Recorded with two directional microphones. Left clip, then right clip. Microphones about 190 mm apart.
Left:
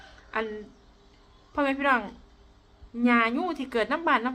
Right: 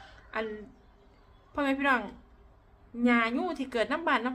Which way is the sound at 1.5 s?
10° left (ahead or behind).